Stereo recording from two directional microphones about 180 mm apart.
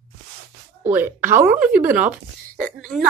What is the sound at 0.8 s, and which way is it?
Speech, 10° right (ahead or behind).